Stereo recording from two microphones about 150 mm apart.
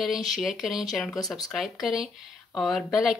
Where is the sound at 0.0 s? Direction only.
Centre (ahead or behind).